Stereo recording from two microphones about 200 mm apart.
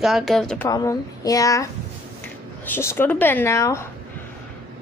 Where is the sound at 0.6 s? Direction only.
15° left (ahead or behind).